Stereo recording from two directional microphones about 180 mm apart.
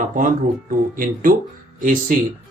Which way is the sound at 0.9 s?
50° right (ahead or behind).